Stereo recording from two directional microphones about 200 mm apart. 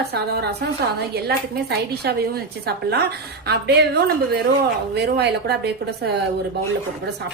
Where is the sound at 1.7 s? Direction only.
55° right (ahead or behind).